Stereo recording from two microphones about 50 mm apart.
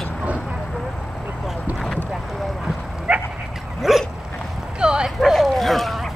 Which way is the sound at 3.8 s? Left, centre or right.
Centre.